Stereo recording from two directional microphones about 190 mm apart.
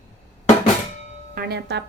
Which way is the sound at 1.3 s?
55° right (ahead or behind).